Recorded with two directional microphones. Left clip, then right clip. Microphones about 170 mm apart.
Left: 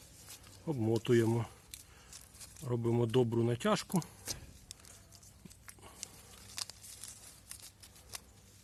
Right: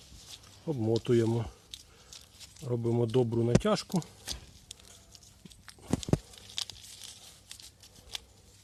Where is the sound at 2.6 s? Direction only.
30° right (ahead or behind).